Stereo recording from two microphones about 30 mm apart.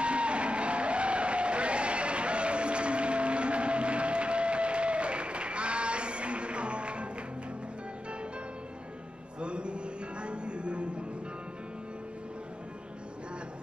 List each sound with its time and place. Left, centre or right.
0.0 s music: right
9.4 s a sound: right
10.2 s music: right